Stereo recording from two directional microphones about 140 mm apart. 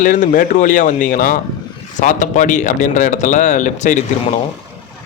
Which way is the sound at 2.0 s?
65° left (ahead or behind).